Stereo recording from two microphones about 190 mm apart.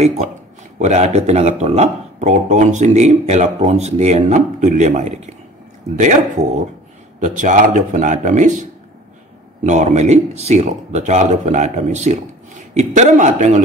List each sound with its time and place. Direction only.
0.7 s speech: 35° right (ahead or behind)